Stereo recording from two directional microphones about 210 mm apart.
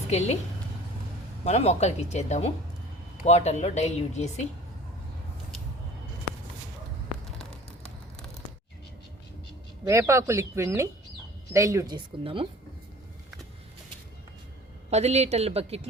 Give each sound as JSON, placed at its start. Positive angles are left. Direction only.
{"t": 0.1, "sound": "speech", "side_deg": 30}
{"t": 1.5, "sound": "speech", "side_deg": 30}
{"t": 9.8, "sound": "speech", "side_deg": -15}
{"t": 14.8, "sound": "a woman's voice", "side_deg": -30}